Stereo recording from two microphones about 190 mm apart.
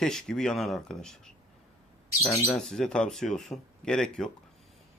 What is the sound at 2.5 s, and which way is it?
A man's voice, 5° left (ahead or behind).